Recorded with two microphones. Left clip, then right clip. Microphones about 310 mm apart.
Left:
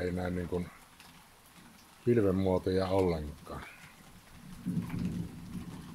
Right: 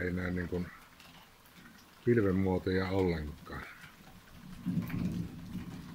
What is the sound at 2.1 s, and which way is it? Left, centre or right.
Speech, centre.